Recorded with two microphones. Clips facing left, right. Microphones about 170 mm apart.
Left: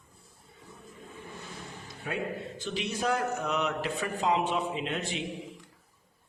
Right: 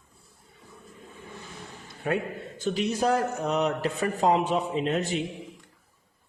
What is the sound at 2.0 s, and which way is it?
Speech, 55° right (ahead or behind).